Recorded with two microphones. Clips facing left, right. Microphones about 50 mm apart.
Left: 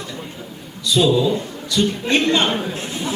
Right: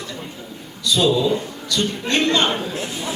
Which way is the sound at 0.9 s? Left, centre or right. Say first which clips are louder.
Left 2 dB; centre.